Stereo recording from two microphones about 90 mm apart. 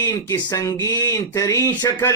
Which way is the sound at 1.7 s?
25° left (ahead or behind).